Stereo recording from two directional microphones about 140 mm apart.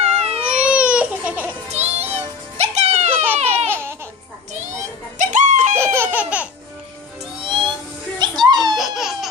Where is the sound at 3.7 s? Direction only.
15° right (ahead or behind).